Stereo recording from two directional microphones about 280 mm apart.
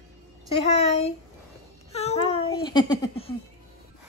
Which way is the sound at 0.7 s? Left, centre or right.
Left.